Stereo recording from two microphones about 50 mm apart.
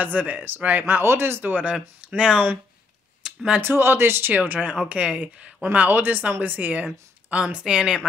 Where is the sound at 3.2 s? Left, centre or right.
Centre.